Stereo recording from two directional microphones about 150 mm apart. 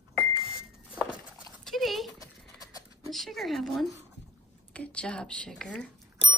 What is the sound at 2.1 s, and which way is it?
Clip-clop, 25° left (ahead or behind).